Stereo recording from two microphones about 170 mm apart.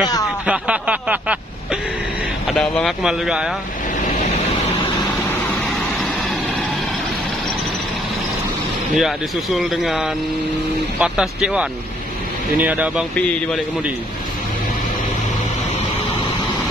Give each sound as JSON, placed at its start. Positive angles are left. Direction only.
{"t": 0.5, "sound": "speech", "side_deg": -5}
{"t": 2.5, "sound": "speech", "side_deg": 5}
{"t": 8.9, "sound": "speech", "side_deg": 0}